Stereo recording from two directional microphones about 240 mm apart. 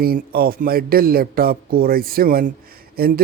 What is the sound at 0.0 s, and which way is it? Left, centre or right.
Speech, right.